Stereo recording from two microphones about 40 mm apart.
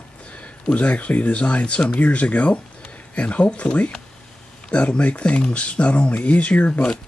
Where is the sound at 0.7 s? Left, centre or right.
Left.